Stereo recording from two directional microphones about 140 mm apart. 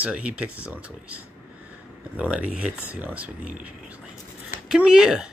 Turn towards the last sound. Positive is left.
turn(degrees=-5)  # may be behind; listen again after turning